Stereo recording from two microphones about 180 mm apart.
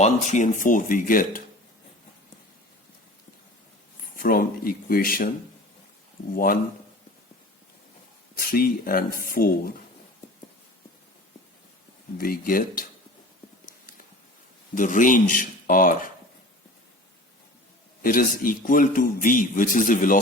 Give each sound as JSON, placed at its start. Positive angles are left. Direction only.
{"t": 0.0, "sound": "a man's voice", "side_deg": 40}
{"t": 4.2, "sound": "a man's voice", "side_deg": 55}
{"t": 6.3, "sound": "a man's voice", "side_deg": 50}
{"t": 8.4, "sound": "a man's voice", "side_deg": 55}
{"t": 12.1, "sound": "a man's voice", "side_deg": 55}
{"t": 14.8, "sound": "a man's voice", "side_deg": 45}
{"t": 18.0, "sound": "a man's voice", "side_deg": 50}